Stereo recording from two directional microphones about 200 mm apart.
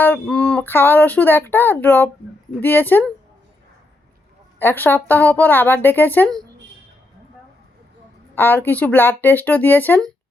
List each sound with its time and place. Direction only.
0.0 s speech: 5° left (ahead or behind)
4.6 s speech: 10° left (ahead or behind)
8.4 s speech: 10° left (ahead or behind)